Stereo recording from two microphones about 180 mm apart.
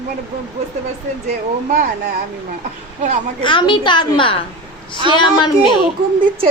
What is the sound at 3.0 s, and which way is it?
Speech, 40° right (ahead or behind).